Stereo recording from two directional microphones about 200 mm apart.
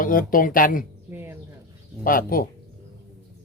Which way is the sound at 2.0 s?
45° left (ahead or behind).